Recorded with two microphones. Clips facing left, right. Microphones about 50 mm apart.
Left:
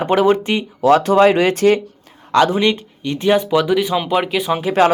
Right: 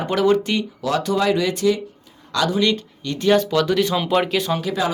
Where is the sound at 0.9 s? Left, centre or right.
Left.